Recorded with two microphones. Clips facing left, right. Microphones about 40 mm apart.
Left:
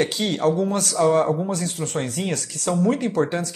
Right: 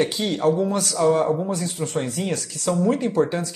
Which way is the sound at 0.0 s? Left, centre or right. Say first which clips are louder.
Even; left.